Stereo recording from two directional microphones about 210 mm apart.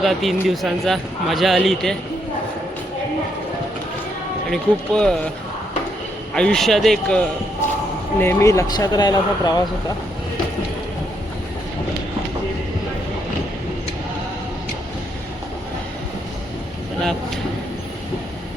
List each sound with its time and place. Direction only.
0.0 s a man's voice: centre (ahead or behind)
4.5 s a man's voice: 5° left (ahead or behind)
6.3 s a man's voice: 5° left (ahead or behind)